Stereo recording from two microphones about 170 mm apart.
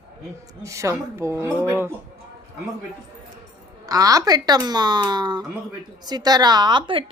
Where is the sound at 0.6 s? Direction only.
15° right (ahead or behind).